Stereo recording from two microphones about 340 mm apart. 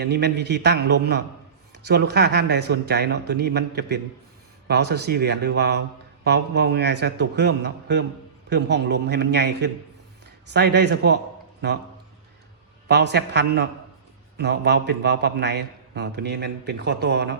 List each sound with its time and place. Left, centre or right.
0.0 s a man's voice: right
12.9 s a man's voice: right